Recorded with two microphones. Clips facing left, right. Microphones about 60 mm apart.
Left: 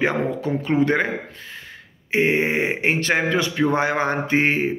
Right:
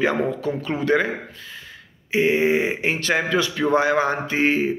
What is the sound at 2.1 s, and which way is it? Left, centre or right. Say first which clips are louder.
A man's voice: right 1 dB; left.